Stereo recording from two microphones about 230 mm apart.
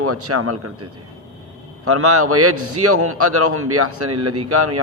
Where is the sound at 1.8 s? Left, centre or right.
Right.